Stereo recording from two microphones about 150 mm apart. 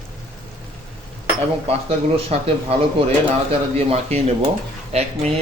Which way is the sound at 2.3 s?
45° right (ahead or behind).